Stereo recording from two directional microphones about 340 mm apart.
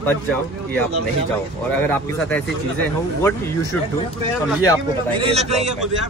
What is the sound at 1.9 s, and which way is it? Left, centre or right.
Speech, centre.